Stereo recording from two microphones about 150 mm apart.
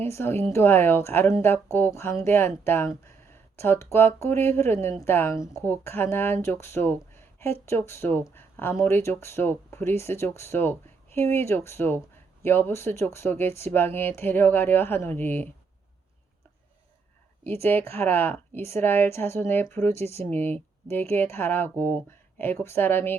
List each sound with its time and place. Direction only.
0.0 s speech: 15° left (ahead or behind)
17.6 s speech: 15° left (ahead or behind)